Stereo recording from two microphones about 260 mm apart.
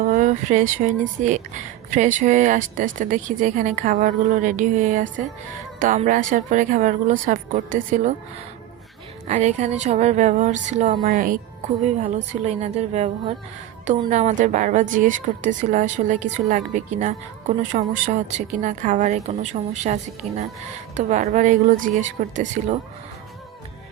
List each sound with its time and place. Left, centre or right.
0.0 s speech: right
9.2 s a woman's voice: right